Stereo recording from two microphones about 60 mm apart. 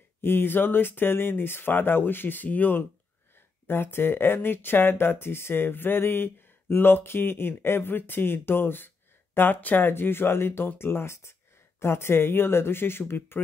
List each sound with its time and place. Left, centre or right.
0.2 s speech: left